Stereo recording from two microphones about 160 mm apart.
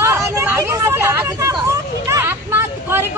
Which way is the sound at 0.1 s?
15° right (ahead or behind).